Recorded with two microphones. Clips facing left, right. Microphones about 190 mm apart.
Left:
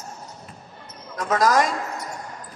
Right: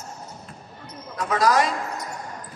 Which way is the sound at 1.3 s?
45° left (ahead or behind).